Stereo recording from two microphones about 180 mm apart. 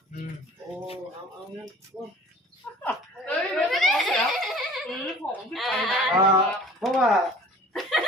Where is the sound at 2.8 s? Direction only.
10° left (ahead or behind).